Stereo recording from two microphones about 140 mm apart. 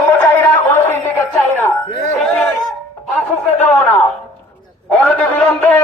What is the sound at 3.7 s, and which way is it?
Music, 15° left (ahead or behind).